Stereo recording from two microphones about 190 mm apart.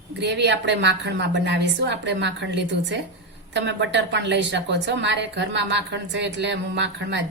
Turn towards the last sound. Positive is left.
turn(degrees=-70)  # may be behind; listen again after turning